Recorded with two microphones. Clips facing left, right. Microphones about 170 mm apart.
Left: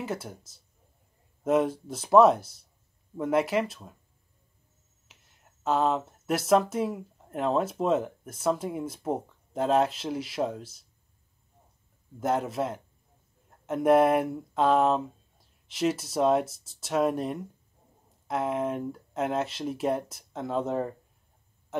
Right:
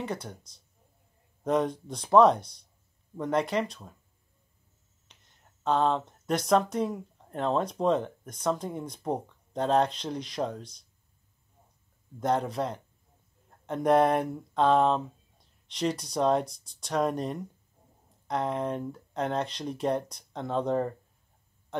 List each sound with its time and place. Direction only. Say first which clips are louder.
0.0 s speech: left 1 dB; 5° left (ahead or behind)
5.0 s speech: left 1 dB; 5° left (ahead or behind)
12.2 s speech: even; 5° left (ahead or behind)